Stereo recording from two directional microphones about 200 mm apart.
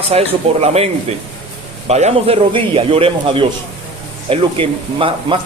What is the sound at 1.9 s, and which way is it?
Speech, 35° right (ahead or behind).